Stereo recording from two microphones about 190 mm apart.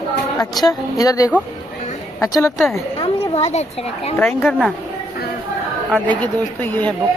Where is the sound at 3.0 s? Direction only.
35° left (ahead or behind).